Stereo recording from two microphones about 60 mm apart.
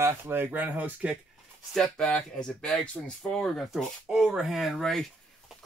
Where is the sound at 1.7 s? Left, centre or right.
Centre.